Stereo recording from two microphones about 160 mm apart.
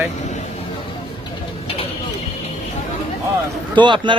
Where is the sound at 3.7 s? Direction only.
30° right (ahead or behind).